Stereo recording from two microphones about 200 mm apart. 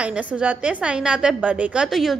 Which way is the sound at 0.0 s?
5° right (ahead or behind).